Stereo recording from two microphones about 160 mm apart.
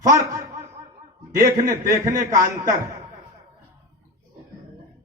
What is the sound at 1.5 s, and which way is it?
Speech, 60° right (ahead or behind).